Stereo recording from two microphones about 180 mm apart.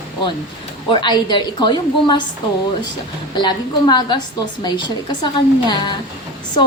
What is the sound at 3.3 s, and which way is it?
A woman's voice, 25° left (ahead or behind).